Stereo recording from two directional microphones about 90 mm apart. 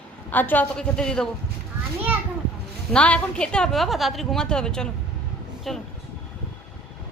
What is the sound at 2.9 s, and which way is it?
A woman's voice, 10° left (ahead or behind).